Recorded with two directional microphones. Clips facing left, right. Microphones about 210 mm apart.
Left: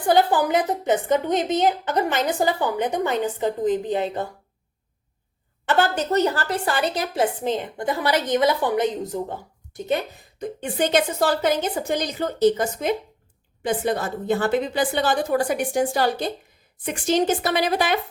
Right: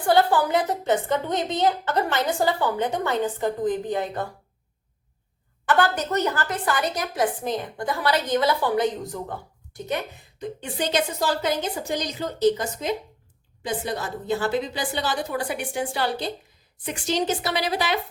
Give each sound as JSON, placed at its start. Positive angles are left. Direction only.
{"t": 0.1, "sound": "a woman's voice", "side_deg": 15}
{"t": 5.6, "sound": "a woman's voice", "side_deg": 25}
{"t": 10.6, "sound": "a woman's voice", "side_deg": 50}